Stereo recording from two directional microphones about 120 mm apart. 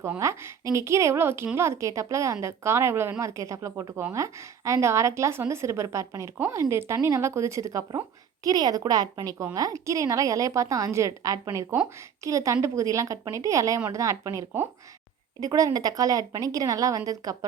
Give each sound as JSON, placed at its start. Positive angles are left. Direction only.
{"t": 0.2, "sound": "a woman's voice", "side_deg": -25}